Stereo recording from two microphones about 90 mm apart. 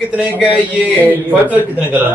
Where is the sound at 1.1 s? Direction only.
20° right (ahead or behind).